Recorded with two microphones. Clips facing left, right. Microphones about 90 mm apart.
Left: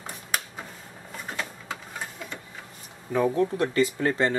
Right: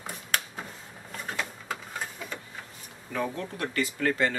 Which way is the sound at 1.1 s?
Centre (ahead or behind).